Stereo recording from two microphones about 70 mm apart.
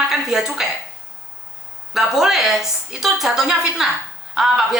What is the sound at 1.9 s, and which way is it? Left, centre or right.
A woman's voice, centre.